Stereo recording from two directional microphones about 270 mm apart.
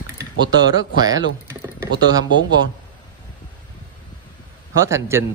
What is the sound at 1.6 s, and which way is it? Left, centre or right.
Speech, centre.